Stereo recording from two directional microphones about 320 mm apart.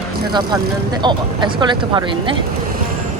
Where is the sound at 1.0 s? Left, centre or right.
Centre.